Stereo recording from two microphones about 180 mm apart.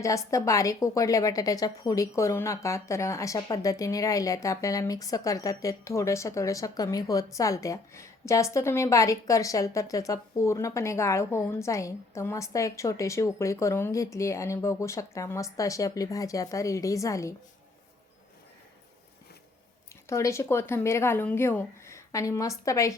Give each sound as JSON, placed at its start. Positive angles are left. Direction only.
{"t": 0.0, "sound": "a woman's voice", "side_deg": 15}
{"t": 20.1, "sound": "a woman's voice", "side_deg": 15}